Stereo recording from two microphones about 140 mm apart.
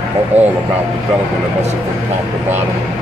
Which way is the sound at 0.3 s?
50° right (ahead or behind).